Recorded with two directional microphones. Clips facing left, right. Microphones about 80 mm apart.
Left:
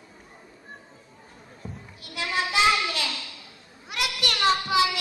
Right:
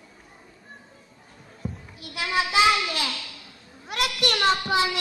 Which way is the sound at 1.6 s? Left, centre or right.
Centre.